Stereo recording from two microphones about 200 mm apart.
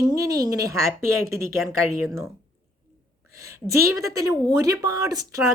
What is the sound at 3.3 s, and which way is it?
Speech, 15° right (ahead or behind).